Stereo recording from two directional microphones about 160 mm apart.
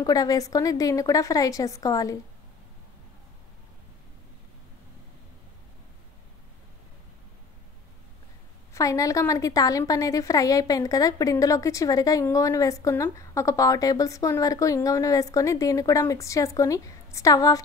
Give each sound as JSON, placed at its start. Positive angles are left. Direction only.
{"t": 0.0, "sound": "a woman's voice", "side_deg": 25}
{"t": 8.7, "sound": "a woman's voice", "side_deg": 20}